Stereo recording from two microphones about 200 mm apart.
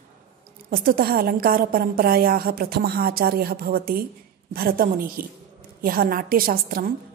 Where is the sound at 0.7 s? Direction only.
45° right (ahead or behind).